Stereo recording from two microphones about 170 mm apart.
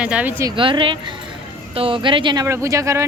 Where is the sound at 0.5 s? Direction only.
30° right (ahead or behind).